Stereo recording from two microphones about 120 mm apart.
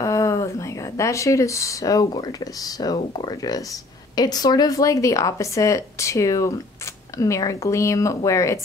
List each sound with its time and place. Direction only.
0.0 s a woman's voice: 25° left (ahead or behind)